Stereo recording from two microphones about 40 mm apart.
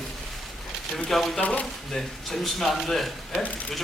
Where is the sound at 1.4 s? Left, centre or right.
Left.